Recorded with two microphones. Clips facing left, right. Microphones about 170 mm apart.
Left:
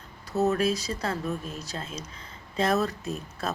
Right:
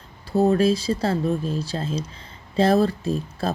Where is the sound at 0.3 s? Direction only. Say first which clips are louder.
Right 6 dB; 30° right (ahead or behind).